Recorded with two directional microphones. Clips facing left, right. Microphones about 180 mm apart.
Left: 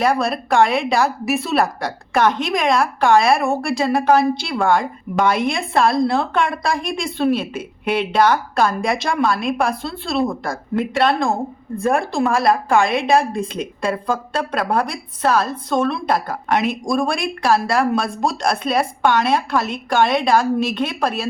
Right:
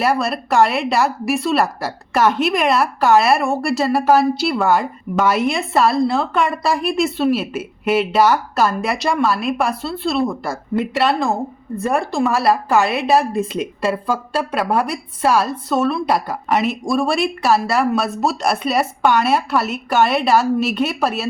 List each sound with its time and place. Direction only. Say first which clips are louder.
0.0 s a woman's voice: even; 5° right (ahead or behind)